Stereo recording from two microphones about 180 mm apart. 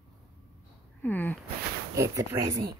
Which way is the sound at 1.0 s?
10° left (ahead or behind).